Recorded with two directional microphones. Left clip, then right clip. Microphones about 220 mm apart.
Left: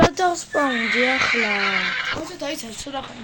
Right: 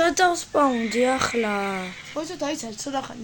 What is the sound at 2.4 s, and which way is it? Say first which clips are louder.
Speech: even; 35° right (ahead or behind).